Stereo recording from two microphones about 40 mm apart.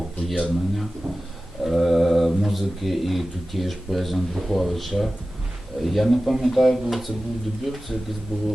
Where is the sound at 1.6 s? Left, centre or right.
Centre.